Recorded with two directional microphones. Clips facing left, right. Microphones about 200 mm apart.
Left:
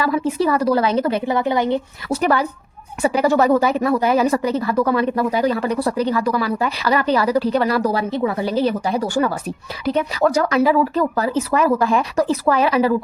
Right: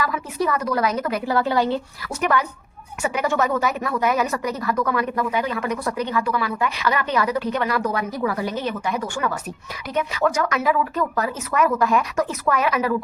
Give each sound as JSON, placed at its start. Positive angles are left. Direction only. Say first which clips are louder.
{"t": 0.0, "sound": "speech", "louder": "left 6 dB", "side_deg": 30}
{"t": 2.0, "sound": "speech", "louder": "left 4 dB", "side_deg": 35}